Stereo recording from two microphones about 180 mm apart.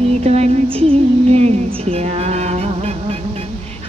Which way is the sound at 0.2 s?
35° right (ahead or behind).